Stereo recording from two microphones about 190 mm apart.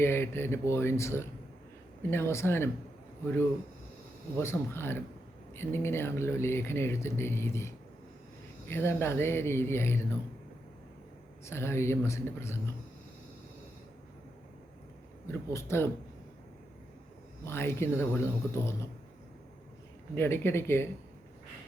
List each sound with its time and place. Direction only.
0.0 s speech: 10° left (ahead or behind)
4.4 s speech: 10° left (ahead or behind)
11.4 s speech: 15° left (ahead or behind)
15.3 s speech: 15° left (ahead or behind)
17.4 s speech: 10° left (ahead or behind)
20.1 s speech: 10° left (ahead or behind)